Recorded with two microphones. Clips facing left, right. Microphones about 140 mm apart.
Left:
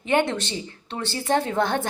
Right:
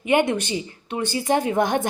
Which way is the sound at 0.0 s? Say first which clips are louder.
Right 2 dB; 10° right (ahead or behind).